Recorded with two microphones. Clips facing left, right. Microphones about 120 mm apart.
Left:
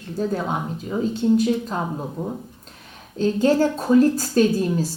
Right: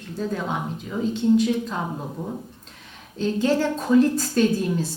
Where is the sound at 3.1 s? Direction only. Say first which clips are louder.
Left 3 dB; 40° left (ahead or behind).